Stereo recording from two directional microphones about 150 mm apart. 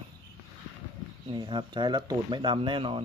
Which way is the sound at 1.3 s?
30° right (ahead or behind).